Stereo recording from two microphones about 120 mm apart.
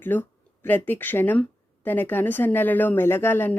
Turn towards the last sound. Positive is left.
turn(degrees=20)  # may be behind; listen again after turning